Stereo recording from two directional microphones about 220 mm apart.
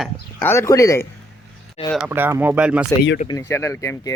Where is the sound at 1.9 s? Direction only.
5° right (ahead or behind).